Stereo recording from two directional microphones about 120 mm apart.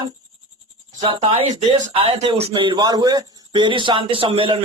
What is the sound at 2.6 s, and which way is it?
Speech, 35° right (ahead or behind).